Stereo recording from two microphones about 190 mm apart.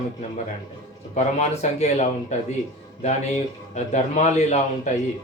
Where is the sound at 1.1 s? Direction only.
35° left (ahead or behind).